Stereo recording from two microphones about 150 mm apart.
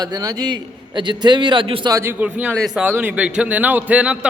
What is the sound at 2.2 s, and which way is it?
A man's voice, 10° right (ahead or behind).